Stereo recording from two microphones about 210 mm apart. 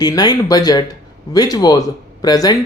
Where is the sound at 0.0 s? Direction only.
20° left (ahead or behind).